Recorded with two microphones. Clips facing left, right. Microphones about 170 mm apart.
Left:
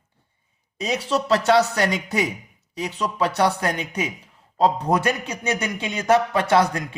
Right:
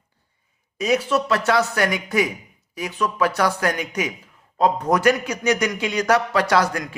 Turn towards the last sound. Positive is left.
turn(degrees=25)  # may be behind; listen again after turning